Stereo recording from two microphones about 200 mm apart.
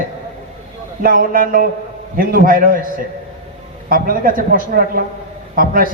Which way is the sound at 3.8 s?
45° right (ahead or behind).